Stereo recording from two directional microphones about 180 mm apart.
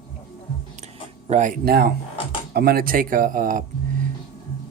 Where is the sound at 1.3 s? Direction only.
45° right (ahead or behind).